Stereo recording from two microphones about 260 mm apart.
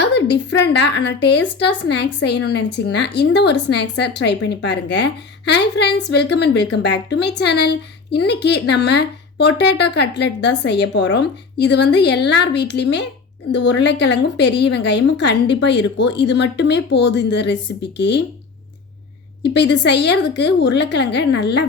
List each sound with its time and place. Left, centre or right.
0.0 s a woman's voice: left
19.4 s a woman's voice: left